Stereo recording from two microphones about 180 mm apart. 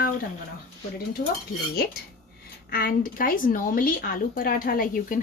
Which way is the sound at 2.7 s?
55° left (ahead or behind).